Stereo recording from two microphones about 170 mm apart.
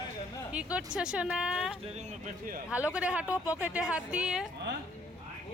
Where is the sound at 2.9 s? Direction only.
5° right (ahead or behind).